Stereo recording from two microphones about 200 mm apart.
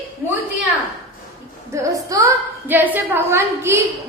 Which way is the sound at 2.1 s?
15° right (ahead or behind).